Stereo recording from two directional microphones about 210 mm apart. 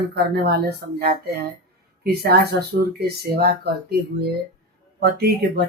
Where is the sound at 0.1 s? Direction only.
50° right (ahead or behind).